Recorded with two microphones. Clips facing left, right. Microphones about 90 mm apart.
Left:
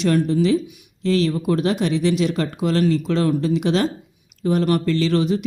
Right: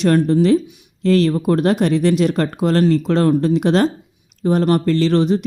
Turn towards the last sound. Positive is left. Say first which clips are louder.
# right 4 dB
turn(degrees=-35)  # may be behind; listen again after turning